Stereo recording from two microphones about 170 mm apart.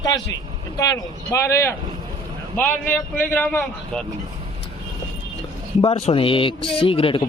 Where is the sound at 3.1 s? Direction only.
10° left (ahead or behind).